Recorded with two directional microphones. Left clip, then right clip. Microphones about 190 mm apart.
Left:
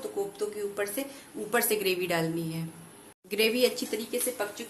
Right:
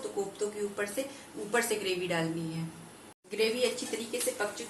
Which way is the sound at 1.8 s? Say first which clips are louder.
Left 4 dB; 60° left (ahead or behind).